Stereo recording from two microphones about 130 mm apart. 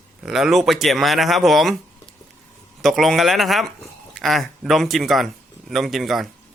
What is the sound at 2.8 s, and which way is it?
Speech, centre (ahead or behind).